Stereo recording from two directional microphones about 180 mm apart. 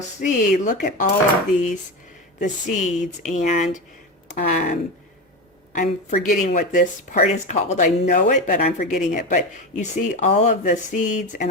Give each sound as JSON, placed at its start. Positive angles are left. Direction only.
{"t": 0.3, "sound": "speech", "side_deg": 45}
{"t": 2.4, "sound": "speech", "side_deg": 45}